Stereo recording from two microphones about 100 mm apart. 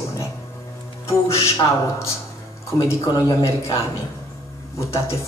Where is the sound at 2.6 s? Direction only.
35° left (ahead or behind).